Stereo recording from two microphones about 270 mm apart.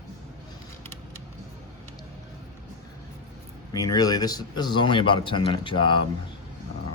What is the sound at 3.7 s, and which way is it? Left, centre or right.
Speech, centre.